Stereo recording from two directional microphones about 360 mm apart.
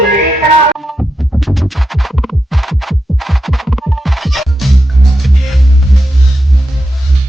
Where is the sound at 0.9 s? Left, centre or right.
Centre.